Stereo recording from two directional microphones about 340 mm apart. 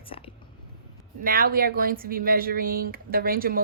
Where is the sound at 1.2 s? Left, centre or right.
Right.